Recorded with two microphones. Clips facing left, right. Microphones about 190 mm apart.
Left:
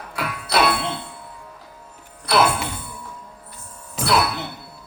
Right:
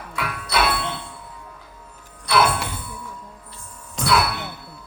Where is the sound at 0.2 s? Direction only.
30° left (ahead or behind).